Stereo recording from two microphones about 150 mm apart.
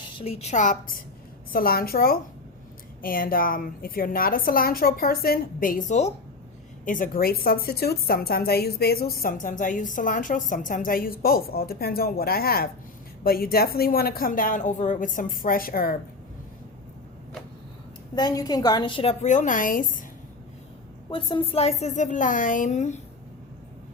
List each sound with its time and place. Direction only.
0.2 s a woman's voice: 45° left (ahead or behind); by 1.0 s 65° left (ahead or behind)
1.5 s a woman's voice: 80° left; by 6.1 s 50° left (ahead or behind)
6.8 s a woman's voice: 65° left (ahead or behind); by 9.1 s 90° left
9.2 s a woman's voice: 60° left (ahead or behind)
18.1 s a woman's voice: 25° left (ahead or behind)
19.2 s a woman's voice: 55° left (ahead or behind)
21.1 s a woman's voice: 35° left (ahead or behind); by 23.0 s 50° left (ahead or behind)